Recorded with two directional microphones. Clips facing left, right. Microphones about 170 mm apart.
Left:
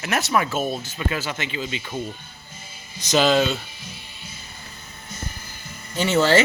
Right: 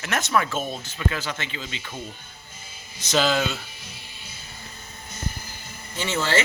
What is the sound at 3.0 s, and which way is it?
Speech, 20° left (ahead or behind).